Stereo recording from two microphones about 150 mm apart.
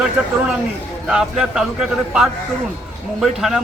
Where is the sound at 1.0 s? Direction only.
5° right (ahead or behind).